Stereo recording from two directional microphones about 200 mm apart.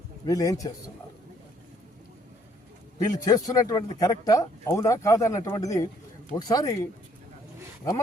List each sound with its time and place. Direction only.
0.3 s speech: 15° left (ahead or behind)
3.0 s speech: 15° left (ahead or behind)